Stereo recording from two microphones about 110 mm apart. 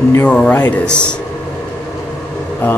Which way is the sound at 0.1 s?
20° left (ahead or behind).